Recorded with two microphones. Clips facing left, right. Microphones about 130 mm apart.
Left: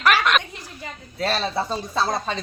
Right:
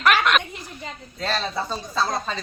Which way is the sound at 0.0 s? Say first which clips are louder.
Even; 5° left (ahead or behind).